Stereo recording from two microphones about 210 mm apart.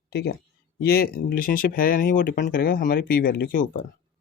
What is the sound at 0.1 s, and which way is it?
Speech, 50° left (ahead or behind).